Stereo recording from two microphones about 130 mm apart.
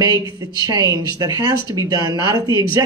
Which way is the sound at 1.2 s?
30° right (ahead or behind).